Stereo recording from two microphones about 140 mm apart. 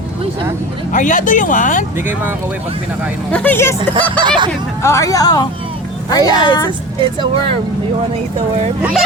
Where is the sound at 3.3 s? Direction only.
10° left (ahead or behind).